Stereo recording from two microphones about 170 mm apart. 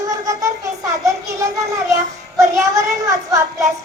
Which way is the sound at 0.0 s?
20° right (ahead or behind).